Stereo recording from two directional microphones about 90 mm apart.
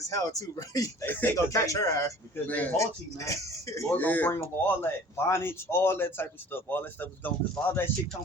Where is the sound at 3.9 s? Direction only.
20° left (ahead or behind).